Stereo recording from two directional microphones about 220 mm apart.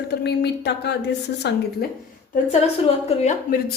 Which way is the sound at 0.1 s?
50° left (ahead or behind).